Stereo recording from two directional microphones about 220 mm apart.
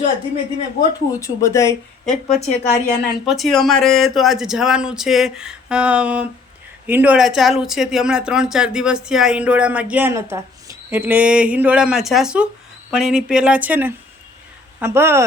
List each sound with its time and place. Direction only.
1.1 s speech: 15° left (ahead or behind)
2.0 s speech: centre (ahead or behind)
2.5 s a woman's voice: 30° left (ahead or behind)
3.2 s speech: centre (ahead or behind)